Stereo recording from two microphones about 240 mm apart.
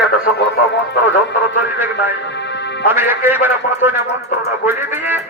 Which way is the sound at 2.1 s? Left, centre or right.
Left.